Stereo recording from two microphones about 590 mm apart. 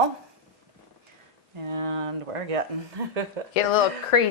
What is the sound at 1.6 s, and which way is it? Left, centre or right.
Speech, right.